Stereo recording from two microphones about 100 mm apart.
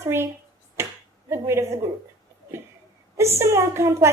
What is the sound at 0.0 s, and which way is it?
Speech, 25° right (ahead or behind).